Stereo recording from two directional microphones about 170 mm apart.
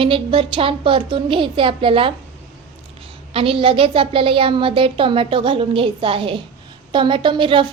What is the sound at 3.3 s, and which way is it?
A woman's voice, 35° right (ahead or behind).